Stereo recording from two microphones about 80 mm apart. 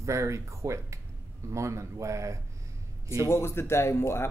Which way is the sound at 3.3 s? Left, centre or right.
Left.